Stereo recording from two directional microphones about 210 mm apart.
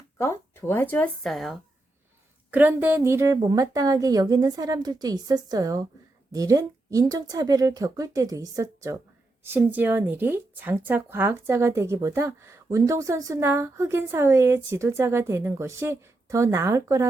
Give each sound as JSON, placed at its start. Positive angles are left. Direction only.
{"t": 0.2, "sound": "speech", "side_deg": 10}